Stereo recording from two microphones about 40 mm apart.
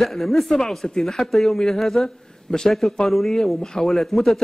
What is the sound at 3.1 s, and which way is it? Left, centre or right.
A man's voice, centre.